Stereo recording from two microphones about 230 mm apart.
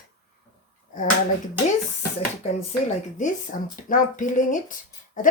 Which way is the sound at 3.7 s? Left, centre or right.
Left.